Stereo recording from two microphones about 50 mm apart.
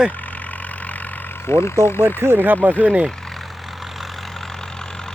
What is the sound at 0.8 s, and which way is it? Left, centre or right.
Vehicle, left.